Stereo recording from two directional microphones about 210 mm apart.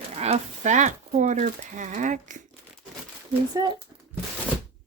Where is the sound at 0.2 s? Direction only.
35° right (ahead or behind).